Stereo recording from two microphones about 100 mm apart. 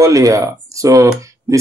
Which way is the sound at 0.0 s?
35° right (ahead or behind).